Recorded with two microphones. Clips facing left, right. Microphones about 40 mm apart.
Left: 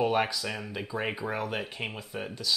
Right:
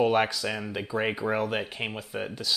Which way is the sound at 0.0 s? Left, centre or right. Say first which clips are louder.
Right 3 dB; centre.